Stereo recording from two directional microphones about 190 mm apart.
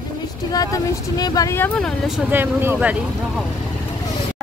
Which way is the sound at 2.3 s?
10° right (ahead or behind).